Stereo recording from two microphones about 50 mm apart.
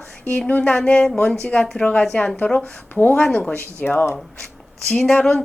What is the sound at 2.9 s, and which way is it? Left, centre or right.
Speech, left.